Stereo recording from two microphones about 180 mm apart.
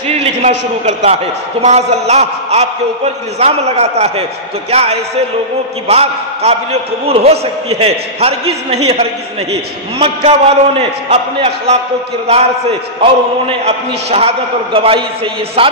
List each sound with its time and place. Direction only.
0.2 s a man's voice: 40° right (ahead or behind)
13.0 s a man's voice: 30° right (ahead or behind)